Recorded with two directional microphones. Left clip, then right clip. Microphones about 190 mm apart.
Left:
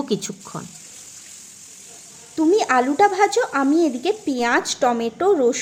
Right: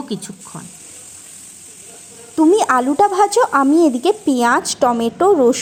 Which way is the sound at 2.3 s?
25° right (ahead or behind).